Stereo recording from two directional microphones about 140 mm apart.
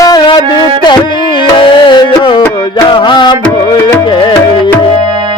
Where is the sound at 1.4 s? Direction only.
35° left (ahead or behind).